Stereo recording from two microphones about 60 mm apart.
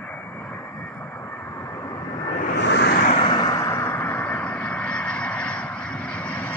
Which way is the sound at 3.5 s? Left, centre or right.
Left.